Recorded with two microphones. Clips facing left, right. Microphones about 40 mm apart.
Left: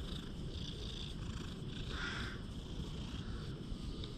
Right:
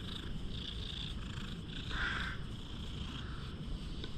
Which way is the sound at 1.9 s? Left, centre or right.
Right.